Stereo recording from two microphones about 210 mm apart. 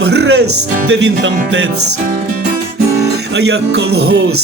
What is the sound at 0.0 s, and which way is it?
Music, 50° right (ahead or behind).